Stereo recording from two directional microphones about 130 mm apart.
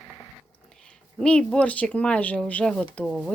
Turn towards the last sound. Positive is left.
turn(degrees=5)  # may be behind; listen again after turning